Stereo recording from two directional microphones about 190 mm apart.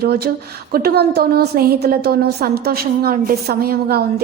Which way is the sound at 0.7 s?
55° right (ahead or behind).